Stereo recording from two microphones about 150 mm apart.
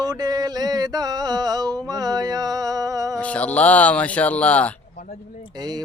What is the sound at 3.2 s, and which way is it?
Speech, 10° left (ahead or behind).